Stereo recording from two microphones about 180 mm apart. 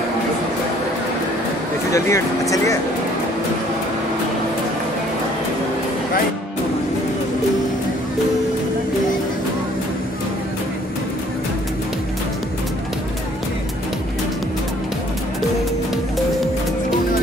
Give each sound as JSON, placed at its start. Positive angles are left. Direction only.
{"t": 1.9, "sound": "speech", "side_deg": 15}